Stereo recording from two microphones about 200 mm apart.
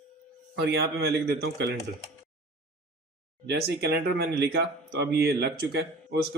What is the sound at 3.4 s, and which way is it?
Speech, 55° right (ahead or behind).